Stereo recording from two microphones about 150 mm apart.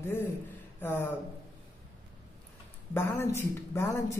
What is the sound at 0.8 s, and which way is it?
Speech, 15° left (ahead or behind).